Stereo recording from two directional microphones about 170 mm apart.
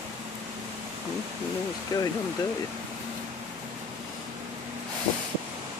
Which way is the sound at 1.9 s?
20° left (ahead or behind).